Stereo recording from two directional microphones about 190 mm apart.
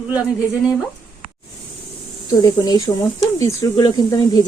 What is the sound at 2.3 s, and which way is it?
Speech, 20° left (ahead or behind).